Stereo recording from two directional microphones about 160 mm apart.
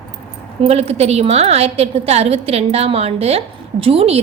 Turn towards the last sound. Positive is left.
turn(degrees=-35)  # may be behind; listen again after turning